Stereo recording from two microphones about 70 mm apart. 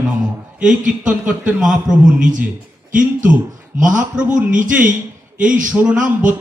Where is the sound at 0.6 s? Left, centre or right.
Centre.